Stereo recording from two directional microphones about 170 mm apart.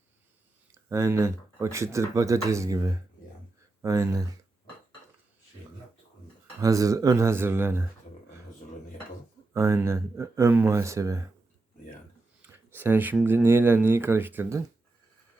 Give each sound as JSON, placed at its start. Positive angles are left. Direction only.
{"t": 0.7, "sound": "speech", "side_deg": -15}
{"t": 6.6, "sound": "speech", "side_deg": -20}
{"t": 9.5, "sound": "speech", "side_deg": -15}
{"t": 12.4, "sound": "speech", "side_deg": -15}